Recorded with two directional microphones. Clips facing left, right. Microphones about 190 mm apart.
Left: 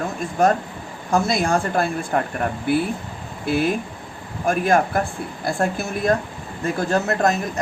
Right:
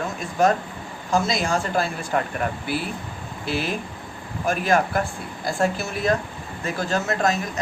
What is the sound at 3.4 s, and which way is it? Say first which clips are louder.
A man's voice: left 6 dB; 50° left (ahead or behind).